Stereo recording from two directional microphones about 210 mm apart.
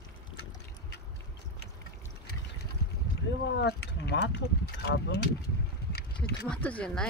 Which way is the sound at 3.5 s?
55° left (ahead or behind).